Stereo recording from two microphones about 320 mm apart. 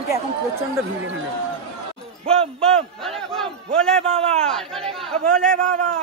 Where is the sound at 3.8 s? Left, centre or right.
Centre.